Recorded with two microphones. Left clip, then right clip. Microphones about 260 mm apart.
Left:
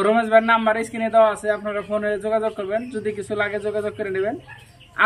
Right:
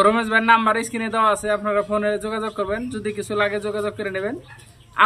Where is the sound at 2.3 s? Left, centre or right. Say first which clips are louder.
Left 5 dB; right.